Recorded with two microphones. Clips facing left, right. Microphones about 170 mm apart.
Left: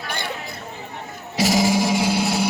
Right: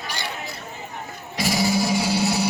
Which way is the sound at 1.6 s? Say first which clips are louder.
Left 2 dB; 90° left.